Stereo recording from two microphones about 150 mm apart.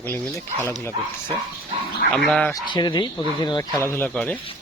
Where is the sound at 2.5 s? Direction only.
30° left (ahead or behind).